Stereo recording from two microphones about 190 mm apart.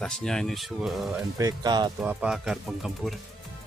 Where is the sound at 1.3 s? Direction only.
20° right (ahead or behind).